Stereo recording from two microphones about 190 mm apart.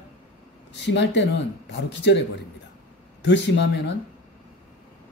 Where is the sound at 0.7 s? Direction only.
65° left (ahead or behind).